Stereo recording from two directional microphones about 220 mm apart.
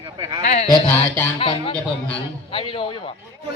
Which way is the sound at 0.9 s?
5° left (ahead or behind).